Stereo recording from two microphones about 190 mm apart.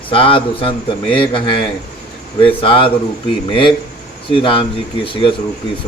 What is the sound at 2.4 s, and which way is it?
Speech, 25° left (ahead or behind).